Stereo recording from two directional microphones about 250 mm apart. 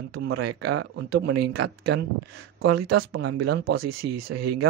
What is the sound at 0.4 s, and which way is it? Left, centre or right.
Speech, right.